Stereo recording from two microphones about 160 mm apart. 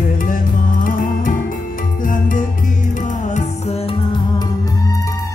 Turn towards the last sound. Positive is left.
turn(degrees=20)  # may be behind; listen again after turning